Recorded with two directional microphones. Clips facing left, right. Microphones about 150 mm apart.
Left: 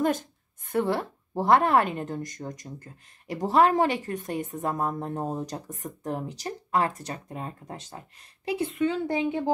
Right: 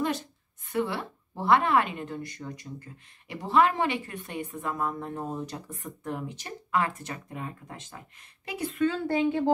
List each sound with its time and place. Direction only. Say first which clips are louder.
0.7 s speech: left 4 dB; 45° left (ahead or behind); by 9.4 s 15° left (ahead or behind)